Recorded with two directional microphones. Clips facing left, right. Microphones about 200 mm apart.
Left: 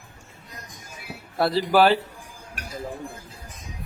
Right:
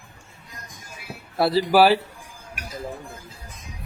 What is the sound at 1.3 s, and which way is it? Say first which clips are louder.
Speech: right 2 dB; 5° right (ahead or behind).